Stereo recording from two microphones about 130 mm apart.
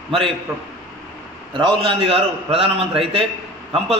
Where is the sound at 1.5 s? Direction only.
40° right (ahead or behind).